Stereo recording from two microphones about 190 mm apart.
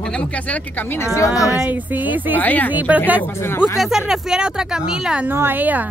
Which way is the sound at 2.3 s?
10° left (ahead or behind).